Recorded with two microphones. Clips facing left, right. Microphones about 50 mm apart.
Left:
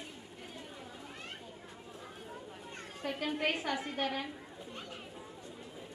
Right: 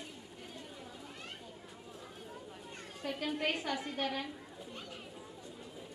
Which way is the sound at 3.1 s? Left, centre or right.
Left.